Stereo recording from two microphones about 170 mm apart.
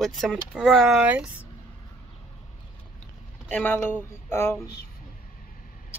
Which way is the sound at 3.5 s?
10° left (ahead or behind).